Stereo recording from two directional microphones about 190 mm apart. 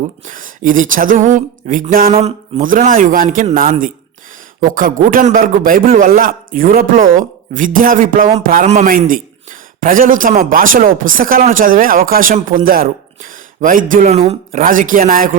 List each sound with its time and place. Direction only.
0.3 s a man's voice: 45° right (ahead or behind)
14.6 s a man's voice: 45° right (ahead or behind)